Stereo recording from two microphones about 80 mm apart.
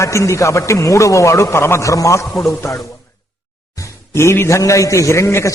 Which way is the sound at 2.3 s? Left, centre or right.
Centre.